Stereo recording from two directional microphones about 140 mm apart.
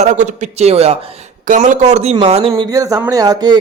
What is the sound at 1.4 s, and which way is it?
A man's voice, 65° right (ahead or behind).